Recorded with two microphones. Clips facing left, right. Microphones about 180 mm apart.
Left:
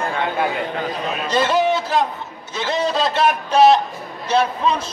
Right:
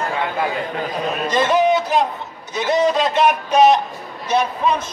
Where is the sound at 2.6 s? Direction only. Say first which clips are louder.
Right 3 dB; 20° right (ahead or behind).